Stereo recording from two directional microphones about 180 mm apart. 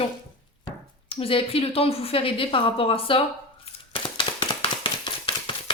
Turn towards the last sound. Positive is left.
turn(degrees=30)  # may be behind; listen again after turning